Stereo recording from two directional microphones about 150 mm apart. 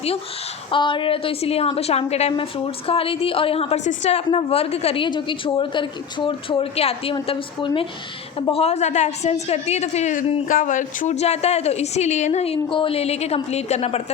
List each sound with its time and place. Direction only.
0.7 s a woman's voice: 35° left (ahead or behind)